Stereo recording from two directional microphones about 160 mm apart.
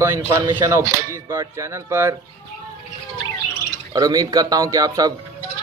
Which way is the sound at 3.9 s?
25° right (ahead or behind).